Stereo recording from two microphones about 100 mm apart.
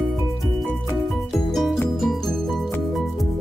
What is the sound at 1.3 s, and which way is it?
Music, centre (ahead or behind).